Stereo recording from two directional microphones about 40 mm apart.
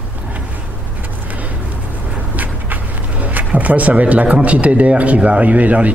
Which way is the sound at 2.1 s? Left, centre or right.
Right.